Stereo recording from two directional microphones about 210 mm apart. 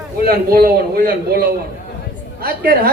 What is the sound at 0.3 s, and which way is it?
A man's voice, 45° right (ahead or behind).